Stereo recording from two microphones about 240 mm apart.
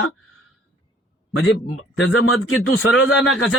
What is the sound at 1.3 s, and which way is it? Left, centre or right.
A man's voice, left.